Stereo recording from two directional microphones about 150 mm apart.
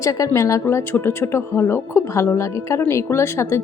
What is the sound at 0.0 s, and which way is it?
A woman's voice, 20° left (ahead or behind).